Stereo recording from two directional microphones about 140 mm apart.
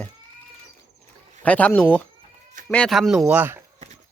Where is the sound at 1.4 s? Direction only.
10° left (ahead or behind); by 3.6 s 15° right (ahead or behind).